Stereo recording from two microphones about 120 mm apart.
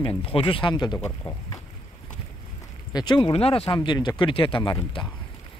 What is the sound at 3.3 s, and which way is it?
Speech, 55° left (ahead or behind).